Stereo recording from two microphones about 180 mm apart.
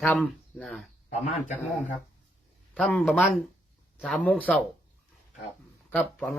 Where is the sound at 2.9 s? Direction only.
5° left (ahead or behind).